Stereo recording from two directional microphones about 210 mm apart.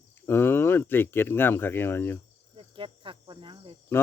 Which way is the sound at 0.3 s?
10° left (ahead or behind).